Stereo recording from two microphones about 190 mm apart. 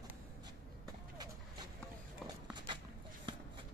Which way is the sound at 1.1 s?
20° right (ahead or behind).